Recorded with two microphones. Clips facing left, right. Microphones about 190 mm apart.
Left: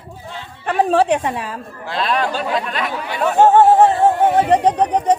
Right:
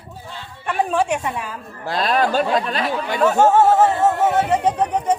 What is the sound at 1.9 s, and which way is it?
Speech, 40° right (ahead or behind).